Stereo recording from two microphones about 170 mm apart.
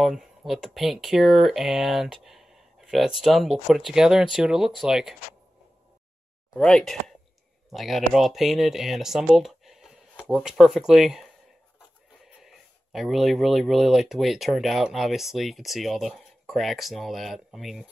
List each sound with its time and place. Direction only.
0.0 s speech: centre (ahead or behind)
6.5 s speech: 5° left (ahead or behind)
12.4 s speech: centre (ahead or behind)